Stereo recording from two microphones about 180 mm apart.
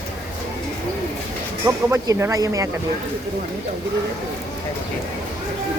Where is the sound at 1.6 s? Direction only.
15° right (ahead or behind).